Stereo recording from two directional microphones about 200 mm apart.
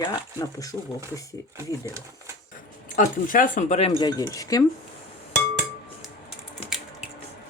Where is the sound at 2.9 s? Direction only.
40° left (ahead or behind).